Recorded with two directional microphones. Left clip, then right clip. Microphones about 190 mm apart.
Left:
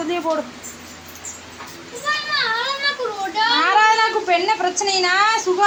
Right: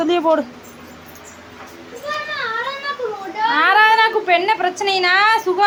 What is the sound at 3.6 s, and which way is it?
Speech, 15° right (ahead or behind).